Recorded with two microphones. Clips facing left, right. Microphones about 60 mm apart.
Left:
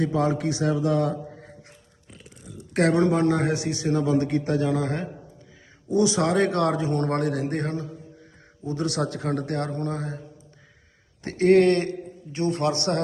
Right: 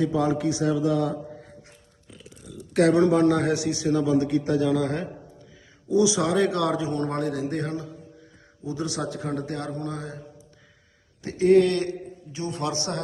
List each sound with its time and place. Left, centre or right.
0.0 s a man's voice: left
3.0 s a man's voice: left
5.9 s a man's voice: left
11.2 s a man's voice: left
11.7 s a man's voice: left
12.3 s a man's voice: left